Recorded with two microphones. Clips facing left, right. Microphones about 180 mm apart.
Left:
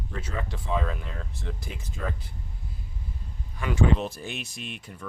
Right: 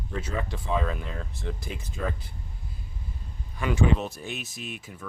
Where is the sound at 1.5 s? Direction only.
5° right (ahead or behind).